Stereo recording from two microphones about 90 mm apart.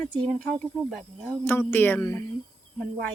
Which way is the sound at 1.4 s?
25° left (ahead or behind).